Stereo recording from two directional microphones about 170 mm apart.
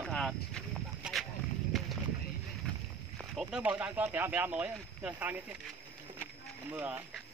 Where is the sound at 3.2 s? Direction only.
5° right (ahead or behind).